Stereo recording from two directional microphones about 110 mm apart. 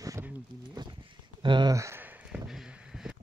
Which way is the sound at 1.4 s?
45° right (ahead or behind).